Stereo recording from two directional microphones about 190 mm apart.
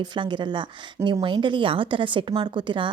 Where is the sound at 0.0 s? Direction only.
25° right (ahead or behind).